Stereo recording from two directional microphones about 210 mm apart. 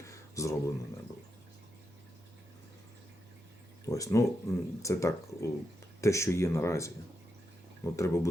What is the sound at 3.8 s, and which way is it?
Speech, 15° left (ahead or behind).